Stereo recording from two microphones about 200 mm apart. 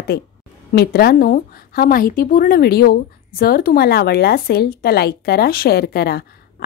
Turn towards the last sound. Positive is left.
turn(degrees=55)  # may be behind; listen again after turning